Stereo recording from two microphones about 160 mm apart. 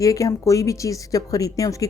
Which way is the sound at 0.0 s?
20° left (ahead or behind).